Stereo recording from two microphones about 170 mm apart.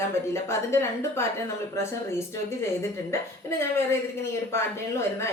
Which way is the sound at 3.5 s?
15° left (ahead or behind).